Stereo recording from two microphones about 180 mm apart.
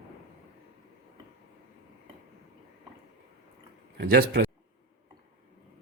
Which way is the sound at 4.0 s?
65° right (ahead or behind).